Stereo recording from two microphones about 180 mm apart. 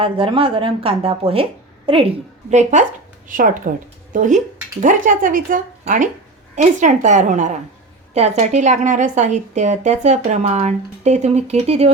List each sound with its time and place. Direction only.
0.0 s a woman's voice: 30° right (ahead or behind)
2.5 s a woman's voice: 40° right (ahead or behind)